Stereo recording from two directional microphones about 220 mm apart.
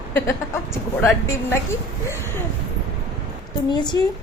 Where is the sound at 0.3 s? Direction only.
10° left (ahead or behind).